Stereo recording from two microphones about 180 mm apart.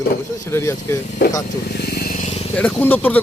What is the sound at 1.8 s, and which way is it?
Vehicle, 55° left (ahead or behind).